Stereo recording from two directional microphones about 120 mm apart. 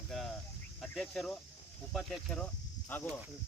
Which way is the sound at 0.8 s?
5° left (ahead or behind).